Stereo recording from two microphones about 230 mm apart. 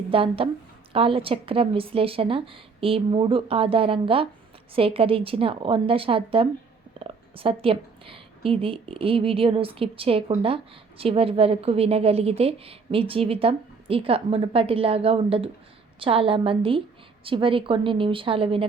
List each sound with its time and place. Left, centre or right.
0.1 s speech: right